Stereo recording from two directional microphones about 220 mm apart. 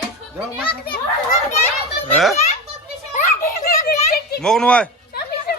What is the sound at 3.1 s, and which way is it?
Children playing, 35° left (ahead or behind).